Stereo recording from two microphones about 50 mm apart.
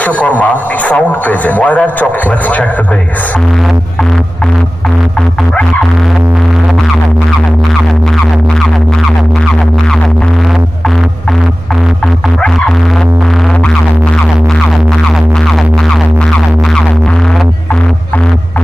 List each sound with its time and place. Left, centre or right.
0.0 s a man's voice: left